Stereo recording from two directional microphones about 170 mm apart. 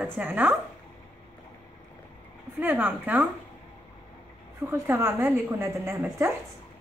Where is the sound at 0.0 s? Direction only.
10° right (ahead or behind).